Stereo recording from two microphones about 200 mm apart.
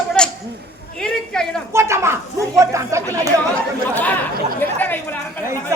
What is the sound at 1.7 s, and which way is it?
Speech, 15° right (ahead or behind).